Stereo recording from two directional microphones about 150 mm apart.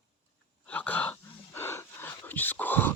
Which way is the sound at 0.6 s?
10° left (ahead or behind).